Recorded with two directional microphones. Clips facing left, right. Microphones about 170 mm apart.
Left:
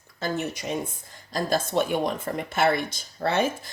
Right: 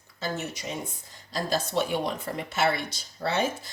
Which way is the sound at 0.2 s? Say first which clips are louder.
Left 4 dB; 55° left (ahead or behind).